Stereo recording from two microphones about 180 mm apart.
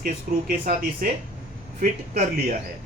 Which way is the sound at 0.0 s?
55° right (ahead or behind).